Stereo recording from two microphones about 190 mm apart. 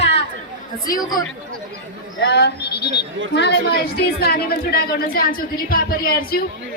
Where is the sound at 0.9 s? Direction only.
45° left (ahead or behind).